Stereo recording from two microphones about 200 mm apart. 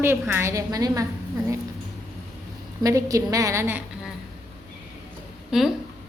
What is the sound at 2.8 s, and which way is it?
A woman's voice, 15° right (ahead or behind).